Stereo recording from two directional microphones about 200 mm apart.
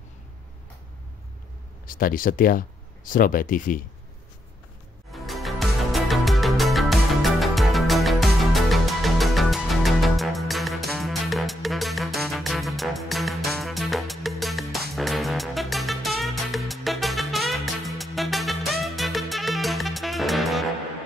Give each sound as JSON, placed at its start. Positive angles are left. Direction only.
{"t": 1.9, "sound": "speech", "side_deg": 45}
{"t": 5.1, "sound": "music", "side_deg": 0}